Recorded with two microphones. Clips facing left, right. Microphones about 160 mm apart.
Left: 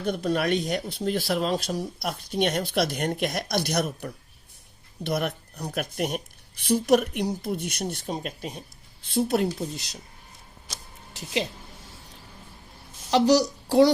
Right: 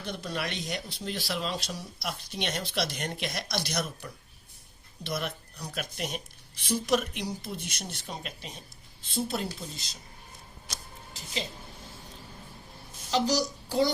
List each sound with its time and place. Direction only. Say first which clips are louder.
0.0 s speech: left 9 dB; 50° left (ahead or behind)
8.0 s speech: left 8 dB; 45° left (ahead or behind); by 10.0 s 65° left (ahead or behind)
13.1 s a child's voice: left 7 dB; 70° left (ahead or behind)